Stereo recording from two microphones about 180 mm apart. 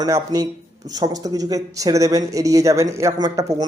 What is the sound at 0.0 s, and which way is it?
Speech, 20° right (ahead or behind).